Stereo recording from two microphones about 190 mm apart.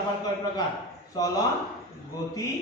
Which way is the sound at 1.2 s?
20° left (ahead or behind).